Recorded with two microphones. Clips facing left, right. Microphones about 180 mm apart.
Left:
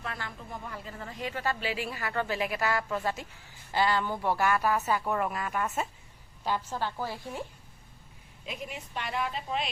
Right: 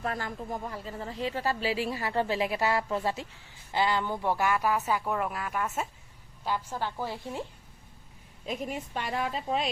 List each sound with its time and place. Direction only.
0.0 s speech: 40° right (ahead or behind)
3.7 s speech: 20° right (ahead or behind); by 5.6 s 5° right (ahead or behind)
6.7 s speech: 15° right (ahead or behind)
8.4 s speech: 40° right (ahead or behind)